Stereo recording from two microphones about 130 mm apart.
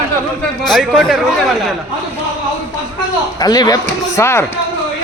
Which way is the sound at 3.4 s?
30° left (ahead or behind).